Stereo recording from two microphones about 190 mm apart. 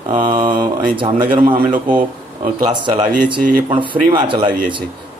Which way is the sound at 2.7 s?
25° right (ahead or behind).